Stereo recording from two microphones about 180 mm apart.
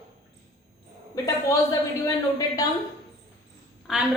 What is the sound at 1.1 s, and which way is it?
A woman's voice, 20° left (ahead or behind).